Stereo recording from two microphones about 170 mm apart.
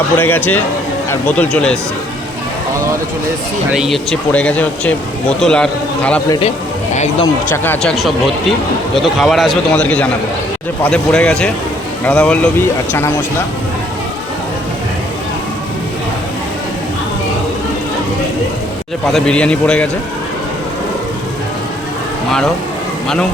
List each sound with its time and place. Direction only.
0.2 s speech: 10° left (ahead or behind)
3.7 s speech: centre (ahead or behind)
6.9 s speech: 40° left (ahead or behind)
7.5 s speech: 10° left (ahead or behind)
19.1 s speech: 5° left (ahead or behind)